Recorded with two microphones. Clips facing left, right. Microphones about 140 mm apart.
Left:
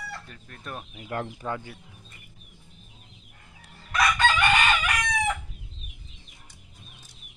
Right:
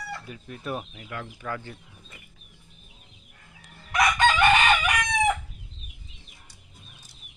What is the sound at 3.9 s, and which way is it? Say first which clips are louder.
Chicken: right 2 dB; 20° right (ahead or behind).